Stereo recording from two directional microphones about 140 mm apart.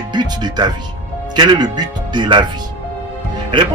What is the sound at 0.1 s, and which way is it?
A man's voice, 30° right (ahead or behind).